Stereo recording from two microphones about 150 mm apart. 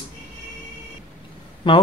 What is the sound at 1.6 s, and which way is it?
Speech, 35° left (ahead or behind).